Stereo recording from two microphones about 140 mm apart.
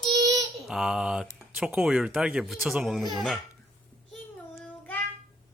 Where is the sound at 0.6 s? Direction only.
5° right (ahead or behind).